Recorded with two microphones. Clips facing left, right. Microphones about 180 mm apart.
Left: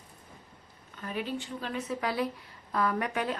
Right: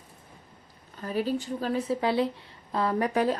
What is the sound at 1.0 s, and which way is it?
Speech, 35° right (ahead or behind).